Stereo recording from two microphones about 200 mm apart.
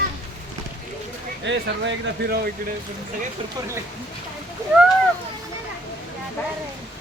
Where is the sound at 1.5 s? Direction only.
60° right (ahead or behind).